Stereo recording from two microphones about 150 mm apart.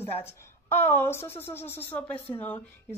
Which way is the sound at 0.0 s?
15° left (ahead or behind).